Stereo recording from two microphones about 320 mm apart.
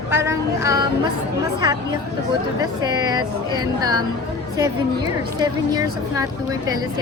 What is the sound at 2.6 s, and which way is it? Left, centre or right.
A woman's voice, centre.